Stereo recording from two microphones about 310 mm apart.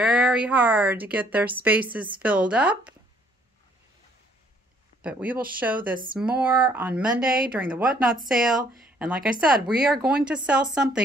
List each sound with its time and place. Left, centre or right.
0.0 s a woman's voice: centre
5.0 s a woman's voice: centre
5.8 s speech: right
6.1 s a woman's voice: centre